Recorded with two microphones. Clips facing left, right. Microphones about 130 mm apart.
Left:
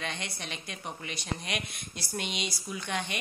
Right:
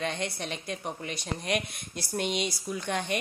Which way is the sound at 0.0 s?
40° right (ahead or behind).